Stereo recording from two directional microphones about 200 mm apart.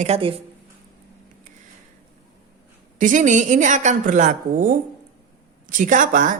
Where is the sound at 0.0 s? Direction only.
30° right (ahead or behind).